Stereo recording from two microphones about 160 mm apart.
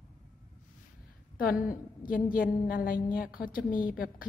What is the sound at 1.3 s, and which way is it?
A woman's voice, 65° left (ahead or behind).